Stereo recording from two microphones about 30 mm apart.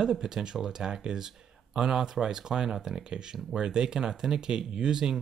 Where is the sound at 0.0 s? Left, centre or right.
Centre.